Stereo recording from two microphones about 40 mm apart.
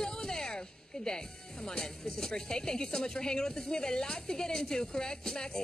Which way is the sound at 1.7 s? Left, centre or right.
Centre.